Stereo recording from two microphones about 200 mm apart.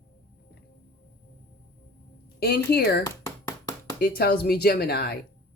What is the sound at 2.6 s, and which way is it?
Speech, 55° left (ahead or behind).